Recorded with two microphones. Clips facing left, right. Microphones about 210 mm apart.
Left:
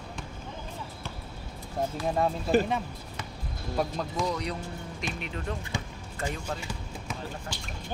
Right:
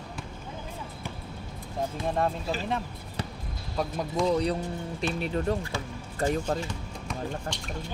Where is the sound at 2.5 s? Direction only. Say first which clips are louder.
Left 11 dB; 55° left (ahead or behind).